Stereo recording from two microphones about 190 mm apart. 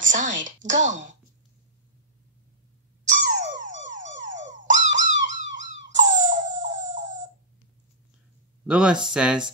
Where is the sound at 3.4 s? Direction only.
40° right (ahead or behind).